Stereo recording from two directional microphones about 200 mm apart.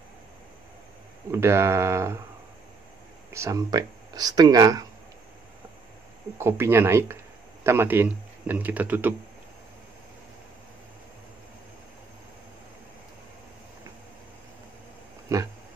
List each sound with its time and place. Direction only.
1.3 s speech: 15° right (ahead or behind)
3.3 s speech: 15° right (ahead or behind)
6.3 s speech: 10° right (ahead or behind)
15.3 s speech: 15° right (ahead or behind)